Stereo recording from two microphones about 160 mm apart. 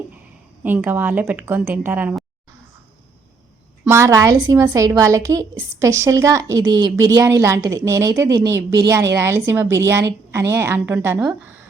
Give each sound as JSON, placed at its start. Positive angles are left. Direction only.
{"t": 0.6, "sound": "speech", "side_deg": -10}
{"t": 3.8, "sound": "a woman's voice", "side_deg": -20}